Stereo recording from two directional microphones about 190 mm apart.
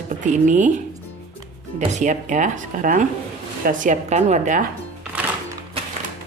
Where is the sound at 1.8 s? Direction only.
40° right (ahead or behind).